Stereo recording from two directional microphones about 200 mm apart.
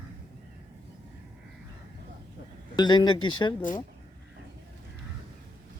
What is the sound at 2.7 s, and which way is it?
Speech, 20° left (ahead or behind).